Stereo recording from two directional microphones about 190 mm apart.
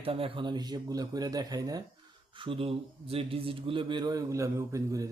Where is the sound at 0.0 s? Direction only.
30° right (ahead or behind).